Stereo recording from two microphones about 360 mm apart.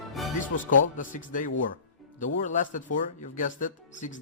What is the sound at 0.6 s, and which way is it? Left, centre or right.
Speech, left.